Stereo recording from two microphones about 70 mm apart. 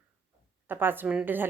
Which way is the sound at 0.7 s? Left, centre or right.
Right.